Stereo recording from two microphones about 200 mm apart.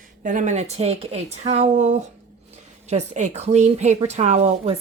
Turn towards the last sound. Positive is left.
turn(degrees=-35)  # may be behind; listen again after turning